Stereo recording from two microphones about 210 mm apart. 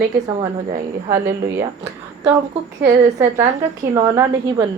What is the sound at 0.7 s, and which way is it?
Speech, 45° right (ahead or behind).